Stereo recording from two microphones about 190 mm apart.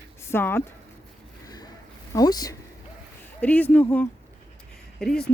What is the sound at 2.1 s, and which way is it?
Speech, 20° left (ahead or behind).